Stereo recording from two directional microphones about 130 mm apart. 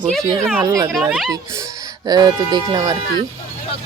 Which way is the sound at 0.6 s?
25° right (ahead or behind).